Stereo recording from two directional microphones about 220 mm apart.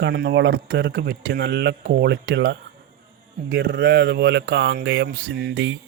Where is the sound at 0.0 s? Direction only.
50° right (ahead or behind).